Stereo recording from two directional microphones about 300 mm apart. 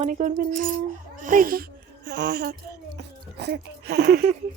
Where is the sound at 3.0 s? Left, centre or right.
Right.